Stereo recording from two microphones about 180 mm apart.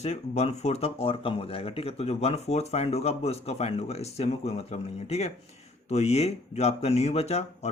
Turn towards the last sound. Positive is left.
turn(degrees=35)  # may be behind; listen again after turning